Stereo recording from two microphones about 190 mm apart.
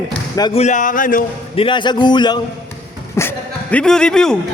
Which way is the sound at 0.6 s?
40° left (ahead or behind).